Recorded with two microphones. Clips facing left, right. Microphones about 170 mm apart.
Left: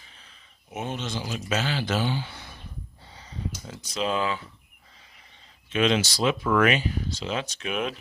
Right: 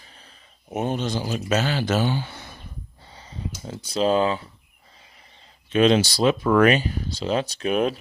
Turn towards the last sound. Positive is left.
turn(degrees=-35)  # may be behind; listen again after turning